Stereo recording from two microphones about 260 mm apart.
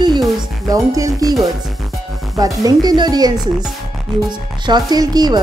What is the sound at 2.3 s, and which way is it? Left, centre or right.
Speech, centre.